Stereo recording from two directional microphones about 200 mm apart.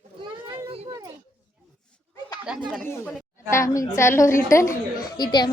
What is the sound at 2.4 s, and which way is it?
Speech, centre (ahead or behind).